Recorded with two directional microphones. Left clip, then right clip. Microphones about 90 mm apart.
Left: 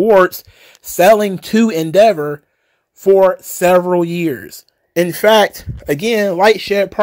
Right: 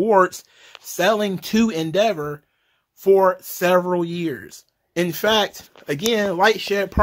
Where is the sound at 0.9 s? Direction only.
65° left (ahead or behind).